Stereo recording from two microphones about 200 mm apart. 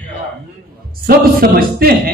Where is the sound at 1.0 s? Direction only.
50° right (ahead or behind).